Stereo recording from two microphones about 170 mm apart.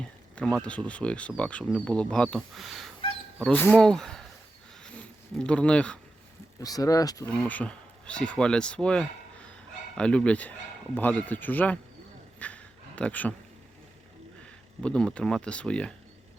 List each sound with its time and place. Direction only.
0.3 s speech: 5° left (ahead or behind)
4.8 s a sound: 5° left (ahead or behind)
6.6 s speech: 20° left (ahead or behind)
7.3 s speech: 10° left (ahead or behind)
12.4 s a sound: 10° left (ahead or behind)
14.8 s speech: 5° left (ahead or behind)